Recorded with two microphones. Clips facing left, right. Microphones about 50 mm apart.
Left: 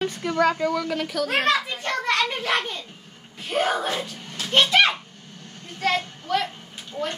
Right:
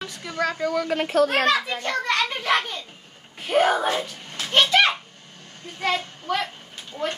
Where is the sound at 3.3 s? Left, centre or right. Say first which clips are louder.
Right 4 dB; right.